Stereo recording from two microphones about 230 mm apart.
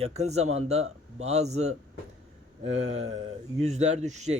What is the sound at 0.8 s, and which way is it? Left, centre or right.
Speech, right.